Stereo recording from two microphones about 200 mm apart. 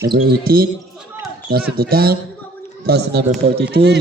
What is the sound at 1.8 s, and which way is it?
A man's voice, 50° right (ahead or behind).